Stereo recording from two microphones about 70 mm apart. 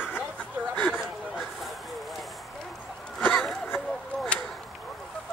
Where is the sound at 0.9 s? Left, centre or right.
Centre.